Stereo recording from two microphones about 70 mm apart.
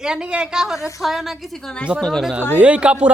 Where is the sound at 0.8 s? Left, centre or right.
Left.